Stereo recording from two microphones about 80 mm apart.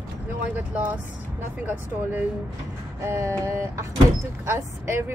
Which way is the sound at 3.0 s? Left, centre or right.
Right.